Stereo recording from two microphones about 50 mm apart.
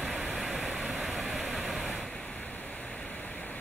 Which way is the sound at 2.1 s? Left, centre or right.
Centre.